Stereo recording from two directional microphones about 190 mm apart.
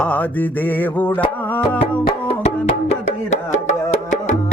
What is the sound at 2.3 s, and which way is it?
Music, 35° left (ahead or behind).